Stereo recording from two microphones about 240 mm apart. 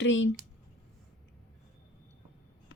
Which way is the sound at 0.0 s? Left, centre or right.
Left.